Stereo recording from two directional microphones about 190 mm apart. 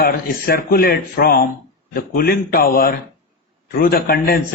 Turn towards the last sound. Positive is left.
turn(degrees=50)  # may be behind; listen again after turning